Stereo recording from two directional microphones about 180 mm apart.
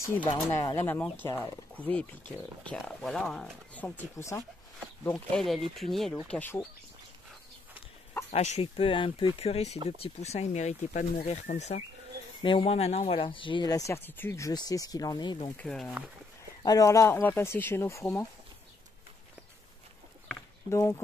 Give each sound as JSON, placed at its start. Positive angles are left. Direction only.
{"t": 0.5, "sound": "speech", "side_deg": 15}
{"t": 5.0, "sound": "speech", "side_deg": 5}
{"t": 8.3, "sound": "speech", "side_deg": 35}
{"t": 12.4, "sound": "speech", "side_deg": 30}
{"t": 15.5, "sound": "speech", "side_deg": 5}
{"t": 16.6, "sound": "speech", "side_deg": 20}
{"t": 20.7, "sound": "speech", "side_deg": 15}